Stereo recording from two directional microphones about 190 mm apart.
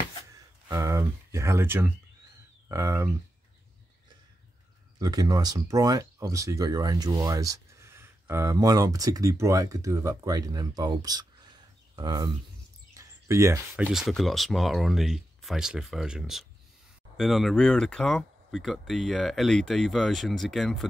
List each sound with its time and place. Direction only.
0.7 s speech: 15° right (ahead or behind)
4.9 s speech: 20° right (ahead or behind)
12.9 s a sound: 15° right (ahead or behind)
13.8 s speech: centre (ahead or behind)